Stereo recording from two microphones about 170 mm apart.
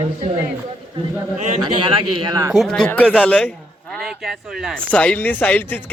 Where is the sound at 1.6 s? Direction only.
30° right (ahead or behind).